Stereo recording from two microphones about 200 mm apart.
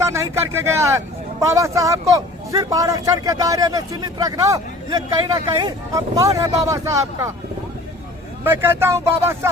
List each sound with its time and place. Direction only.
0.0 s speech: 15° right (ahead or behind)
8.4 s speech: 10° right (ahead or behind)